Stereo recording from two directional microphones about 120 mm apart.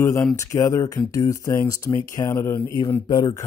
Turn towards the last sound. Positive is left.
turn(degrees=40)  # may be behind; listen again after turning